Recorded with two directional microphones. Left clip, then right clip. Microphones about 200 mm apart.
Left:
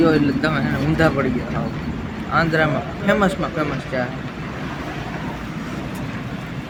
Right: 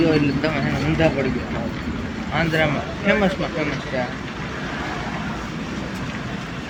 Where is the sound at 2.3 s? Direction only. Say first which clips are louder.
Left 3 dB; 15° left (ahead or behind).